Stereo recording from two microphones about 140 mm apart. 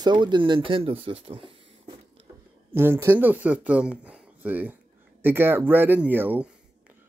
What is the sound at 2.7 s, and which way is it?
Speech, 15° right (ahead or behind).